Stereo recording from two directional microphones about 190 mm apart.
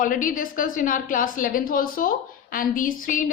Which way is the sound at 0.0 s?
45° left (ahead or behind).